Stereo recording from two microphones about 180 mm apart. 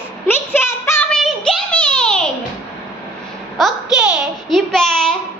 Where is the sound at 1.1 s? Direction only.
Centre (ahead or behind).